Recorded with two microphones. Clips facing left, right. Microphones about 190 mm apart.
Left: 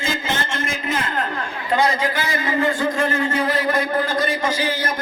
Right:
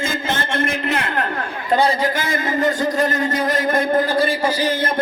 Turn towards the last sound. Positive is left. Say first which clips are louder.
# right 3 dB
turn(degrees=-55)  # may be behind; listen again after turning